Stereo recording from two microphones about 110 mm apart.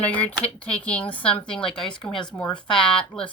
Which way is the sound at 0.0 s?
15° left (ahead or behind).